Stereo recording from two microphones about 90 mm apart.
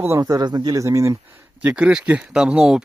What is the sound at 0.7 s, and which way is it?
Speech, 35° right (ahead or behind).